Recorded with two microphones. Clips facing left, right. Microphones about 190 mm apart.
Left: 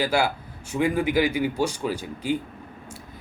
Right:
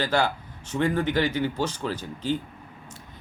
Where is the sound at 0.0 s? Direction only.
10° left (ahead or behind).